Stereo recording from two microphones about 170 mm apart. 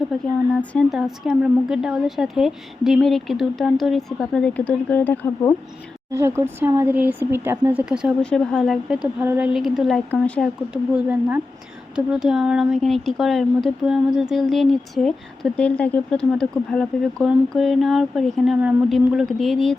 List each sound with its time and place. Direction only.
0.7 s a woman's voice: centre (ahead or behind)
6.1 s a woman's voice: 15° right (ahead or behind); by 10.5 s 10° left (ahead or behind)
10.9 s a woman's voice: 10° right (ahead or behind)